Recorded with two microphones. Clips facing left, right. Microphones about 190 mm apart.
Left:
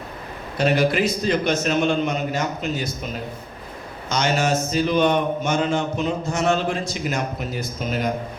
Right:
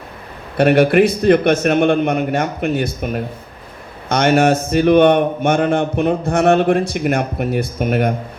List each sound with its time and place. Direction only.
0.5 s a man's voice: 60° right (ahead or behind)